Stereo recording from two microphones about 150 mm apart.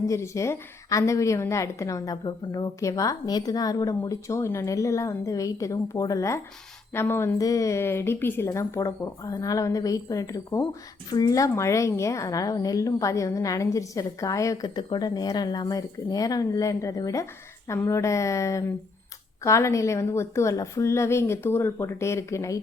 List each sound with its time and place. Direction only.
0.1 s a woman's voice: 20° left (ahead or behind)